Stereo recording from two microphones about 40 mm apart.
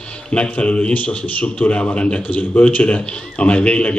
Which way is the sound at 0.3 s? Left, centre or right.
Left.